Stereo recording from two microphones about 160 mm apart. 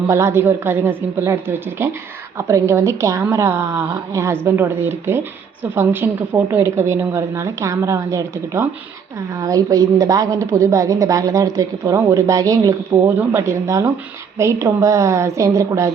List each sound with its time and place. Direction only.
0.1 s a woman's voice: 15° right (ahead or behind)